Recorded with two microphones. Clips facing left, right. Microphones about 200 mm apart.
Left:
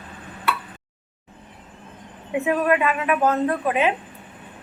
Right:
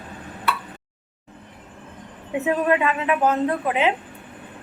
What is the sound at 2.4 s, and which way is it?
Speech, 25° right (ahead or behind).